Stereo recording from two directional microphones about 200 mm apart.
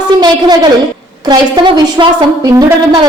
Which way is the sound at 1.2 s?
20° right (ahead or behind).